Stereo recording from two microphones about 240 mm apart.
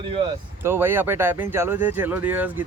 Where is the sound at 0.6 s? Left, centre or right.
Centre.